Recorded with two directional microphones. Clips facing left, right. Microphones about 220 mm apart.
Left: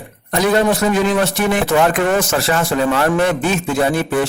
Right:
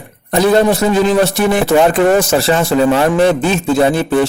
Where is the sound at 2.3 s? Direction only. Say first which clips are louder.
Right 5 dB; 30° right (ahead or behind).